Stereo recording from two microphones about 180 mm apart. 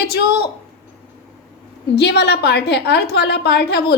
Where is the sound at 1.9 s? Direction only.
65° left (ahead or behind).